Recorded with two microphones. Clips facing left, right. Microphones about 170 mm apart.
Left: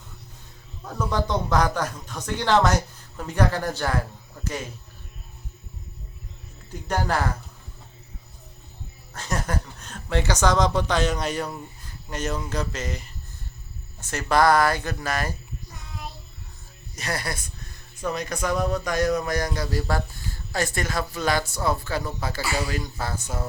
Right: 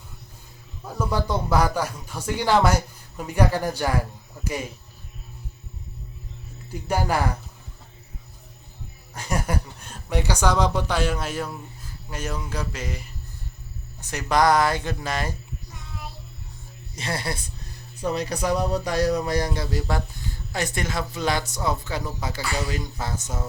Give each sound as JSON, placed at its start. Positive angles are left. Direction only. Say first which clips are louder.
{"t": 0.9, "sound": "speech", "louder": "even", "side_deg": -10}
{"t": 6.8, "sound": "speech", "louder": "right 1 dB", "side_deg": -10}
{"t": 9.1, "sound": "speech", "louder": "right 2 dB", "side_deg": -10}
{"t": 16.9, "sound": "speech", "louder": "right 1 dB", "side_deg": -25}
{"t": 22.4, "sound": "speech", "louder": "left 1 dB", "side_deg": 5}
{"t": 23.0, "sound": "speech", "louder": "left 1 dB", "side_deg": -20}